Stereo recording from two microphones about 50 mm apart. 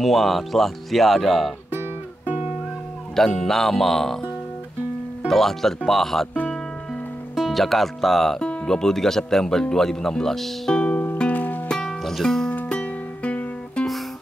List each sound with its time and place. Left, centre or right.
0.0 s speech: centre
1.7 s music: right
3.2 s speech: centre
5.3 s speech: centre
7.3 s speech: centre
8.4 s speech: centre
10.7 s music: left
12.0 s music: centre
12.7 s music: left